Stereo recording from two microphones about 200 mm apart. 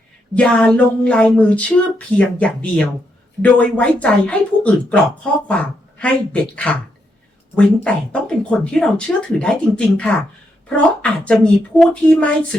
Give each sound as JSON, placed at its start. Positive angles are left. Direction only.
{"t": 0.3, "sound": "speech", "side_deg": 5}